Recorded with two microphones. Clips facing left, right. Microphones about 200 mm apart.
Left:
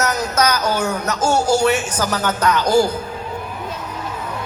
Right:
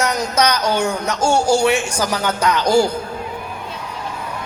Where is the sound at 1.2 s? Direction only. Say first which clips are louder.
Right 1 dB; 10° right (ahead or behind).